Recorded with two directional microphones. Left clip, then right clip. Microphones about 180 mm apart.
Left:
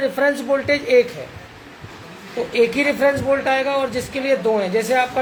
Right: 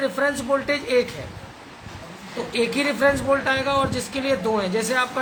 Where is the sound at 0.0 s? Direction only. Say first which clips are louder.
Left 4 dB; 15° left (ahead or behind).